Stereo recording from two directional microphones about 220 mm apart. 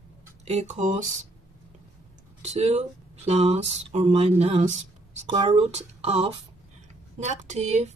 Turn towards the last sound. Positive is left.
turn(degrees=-30)  # may be behind; listen again after turning